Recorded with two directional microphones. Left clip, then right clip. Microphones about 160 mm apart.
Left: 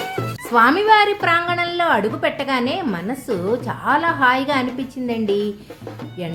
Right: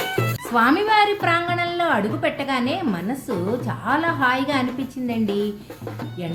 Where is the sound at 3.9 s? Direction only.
50° left (ahead or behind).